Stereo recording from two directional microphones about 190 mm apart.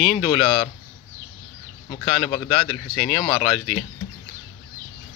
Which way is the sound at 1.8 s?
35° left (ahead or behind).